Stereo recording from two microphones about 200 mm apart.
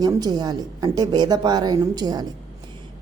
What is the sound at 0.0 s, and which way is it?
A woman's voice, 20° right (ahead or behind).